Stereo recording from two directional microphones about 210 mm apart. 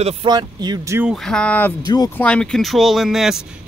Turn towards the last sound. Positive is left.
turn(degrees=0)  # may be behind; listen again after turning